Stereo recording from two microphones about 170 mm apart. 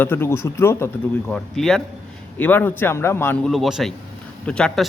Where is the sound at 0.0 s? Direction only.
15° left (ahead or behind).